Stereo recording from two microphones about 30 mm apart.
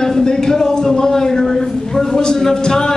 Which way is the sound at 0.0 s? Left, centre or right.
Centre.